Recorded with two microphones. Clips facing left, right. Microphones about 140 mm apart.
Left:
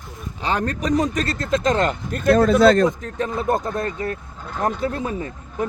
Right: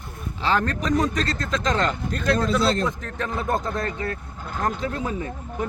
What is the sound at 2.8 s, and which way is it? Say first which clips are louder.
Speech: left 6 dB; 20° left (ahead or behind).